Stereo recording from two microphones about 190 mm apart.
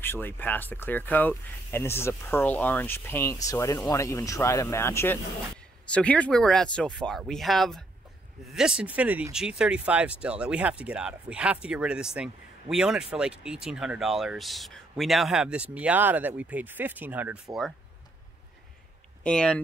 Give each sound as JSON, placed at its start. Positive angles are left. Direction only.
{"t": 0.0, "sound": "speech", "side_deg": 10}
{"t": 19.2, "sound": "speech", "side_deg": 5}